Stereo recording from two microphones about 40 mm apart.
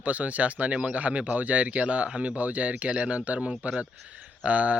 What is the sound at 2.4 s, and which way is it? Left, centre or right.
Speech, right.